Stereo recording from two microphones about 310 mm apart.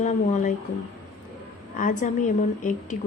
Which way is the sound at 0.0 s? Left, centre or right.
Left.